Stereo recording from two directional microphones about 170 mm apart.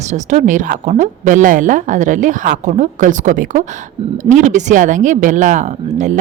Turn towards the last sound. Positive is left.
turn(degrees=-45)  # may be behind; listen again after turning